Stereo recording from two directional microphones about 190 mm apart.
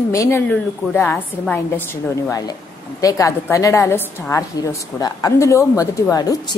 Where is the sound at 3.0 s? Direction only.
15° left (ahead or behind).